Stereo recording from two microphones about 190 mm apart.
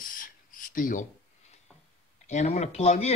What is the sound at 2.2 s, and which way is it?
Speech, 35° left (ahead or behind).